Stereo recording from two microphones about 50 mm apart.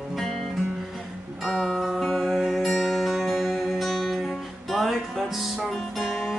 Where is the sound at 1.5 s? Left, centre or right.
Centre.